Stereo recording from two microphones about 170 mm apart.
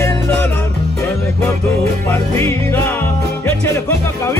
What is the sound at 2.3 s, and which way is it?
Music, 15° left (ahead or behind).